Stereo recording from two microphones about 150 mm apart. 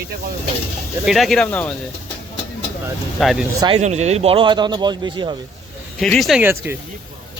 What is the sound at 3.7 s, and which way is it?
Speech, 45° right (ahead or behind).